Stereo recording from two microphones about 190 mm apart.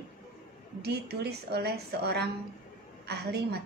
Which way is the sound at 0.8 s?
60° right (ahead or behind).